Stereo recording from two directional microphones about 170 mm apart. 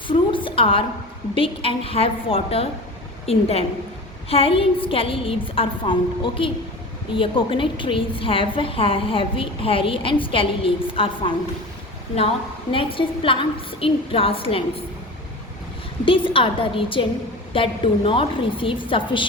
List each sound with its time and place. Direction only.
0.1 s a sound: 30° left (ahead or behind)
1.4 s a woman's voice: 35° left (ahead or behind)
12.7 s a woman's voice: 30° left (ahead or behind)
16.0 s a woman's voice: 30° left (ahead or behind)